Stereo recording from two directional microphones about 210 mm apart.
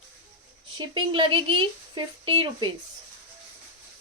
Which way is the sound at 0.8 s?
25° right (ahead or behind).